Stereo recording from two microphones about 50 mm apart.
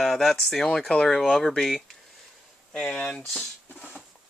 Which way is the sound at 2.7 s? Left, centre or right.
Centre.